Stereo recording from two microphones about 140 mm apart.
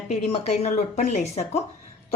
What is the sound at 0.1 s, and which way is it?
Speech, 50° left (ahead or behind).